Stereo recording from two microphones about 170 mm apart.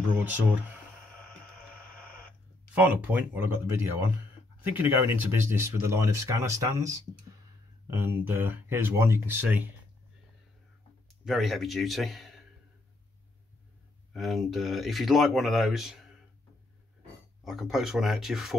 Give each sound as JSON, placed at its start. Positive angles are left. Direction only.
{"t": 0.2, "sound": "speech", "side_deg": -10}
{"t": 2.7, "sound": "speech", "side_deg": -10}
{"t": 11.2, "sound": "speech", "side_deg": 0}
{"t": 14.1, "sound": "speech", "side_deg": 0}
{"t": 17.5, "sound": "speech", "side_deg": 0}